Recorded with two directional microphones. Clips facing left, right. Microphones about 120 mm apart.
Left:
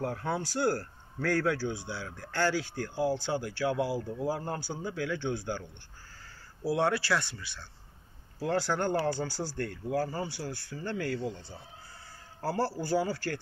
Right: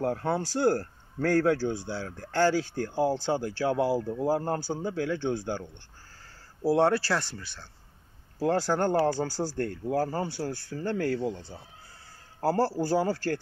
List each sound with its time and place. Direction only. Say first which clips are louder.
0.0 s speech: right 5 dB; 35° right (ahead or behind)
6.6 s speech: right 5 dB; 35° right (ahead or behind)